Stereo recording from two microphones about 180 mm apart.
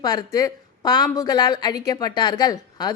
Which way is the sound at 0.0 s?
20° left (ahead or behind).